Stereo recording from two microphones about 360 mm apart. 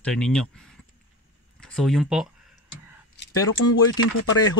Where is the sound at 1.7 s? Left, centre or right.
Centre.